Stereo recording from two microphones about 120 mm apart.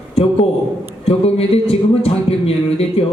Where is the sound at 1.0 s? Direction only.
55° left (ahead or behind).